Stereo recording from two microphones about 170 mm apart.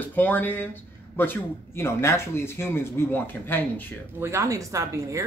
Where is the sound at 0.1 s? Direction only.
10° left (ahead or behind).